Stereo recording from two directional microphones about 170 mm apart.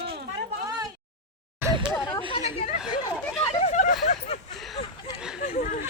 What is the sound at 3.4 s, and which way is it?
Hubbub, 40° left (ahead or behind).